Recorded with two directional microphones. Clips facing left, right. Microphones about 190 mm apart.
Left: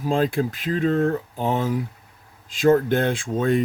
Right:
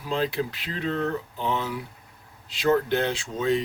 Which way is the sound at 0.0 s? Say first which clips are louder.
Left 5 dB; 50° left (ahead or behind).